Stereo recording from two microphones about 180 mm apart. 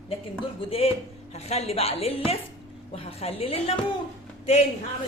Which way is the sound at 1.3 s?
35° left (ahead or behind).